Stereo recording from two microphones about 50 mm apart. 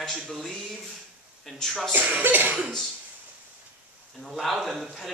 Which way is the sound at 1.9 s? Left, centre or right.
Right.